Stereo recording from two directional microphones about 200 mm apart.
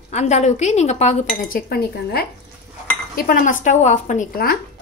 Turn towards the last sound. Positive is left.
turn(degrees=45)  # may be behind; listen again after turning